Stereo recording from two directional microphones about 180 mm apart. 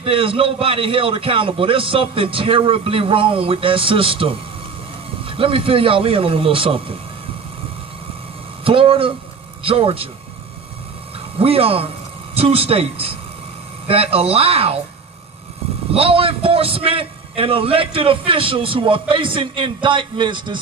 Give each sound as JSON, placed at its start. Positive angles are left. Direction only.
{"t": 0.0, "sound": "a man's voice", "side_deg": -30}
{"t": 8.6, "sound": "a man's voice", "side_deg": -30}
{"t": 11.3, "sound": "a man's voice", "side_deg": -30}
{"t": 15.9, "sound": "a man's voice", "side_deg": -30}